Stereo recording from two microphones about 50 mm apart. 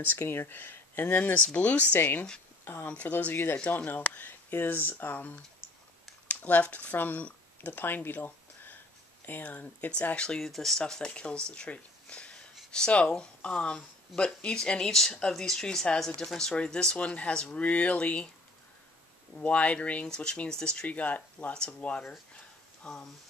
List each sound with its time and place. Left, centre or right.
0.2 s speech: left
0.6 s speech: left
1.5 s speech: left
2.6 s speech: left
2.9 s speech: left
7.8 s speech: left; by 10.4 s centre
10.4 s speech: centre
10.8 s speech: centre
19.3 s speech: left